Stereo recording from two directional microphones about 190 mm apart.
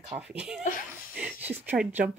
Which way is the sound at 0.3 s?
5° right (ahead or behind).